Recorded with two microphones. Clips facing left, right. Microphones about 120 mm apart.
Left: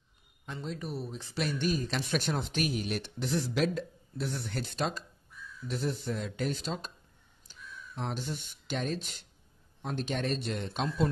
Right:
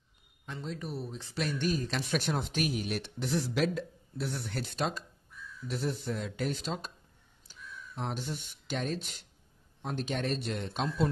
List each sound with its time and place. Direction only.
0.5 s speech: 10° left (ahead or behind)
2.0 s speech: 5° right (ahead or behind)